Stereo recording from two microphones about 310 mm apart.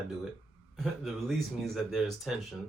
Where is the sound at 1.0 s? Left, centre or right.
Centre.